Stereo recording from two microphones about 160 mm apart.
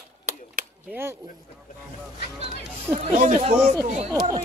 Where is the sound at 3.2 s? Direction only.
40° right (ahead or behind).